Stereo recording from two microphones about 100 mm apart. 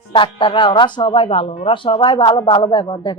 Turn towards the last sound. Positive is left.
turn(degrees=50)  # may be behind; listen again after turning